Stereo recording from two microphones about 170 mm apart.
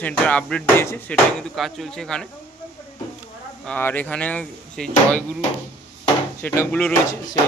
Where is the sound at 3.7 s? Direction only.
10° left (ahead or behind).